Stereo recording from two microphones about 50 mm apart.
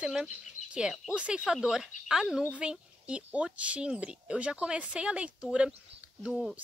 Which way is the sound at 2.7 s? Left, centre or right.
Right.